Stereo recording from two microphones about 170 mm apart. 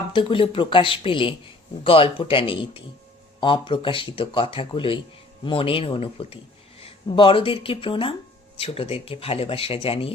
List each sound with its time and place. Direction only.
0.1 s speech: 30° left (ahead or behind)